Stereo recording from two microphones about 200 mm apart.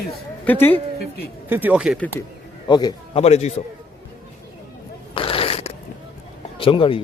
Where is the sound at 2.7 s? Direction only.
20° left (ahead or behind).